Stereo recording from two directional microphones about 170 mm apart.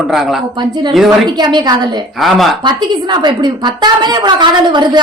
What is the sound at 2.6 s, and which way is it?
A woman's voice, 25° right (ahead or behind).